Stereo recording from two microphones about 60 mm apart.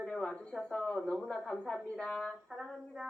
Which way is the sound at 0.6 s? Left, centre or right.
Centre.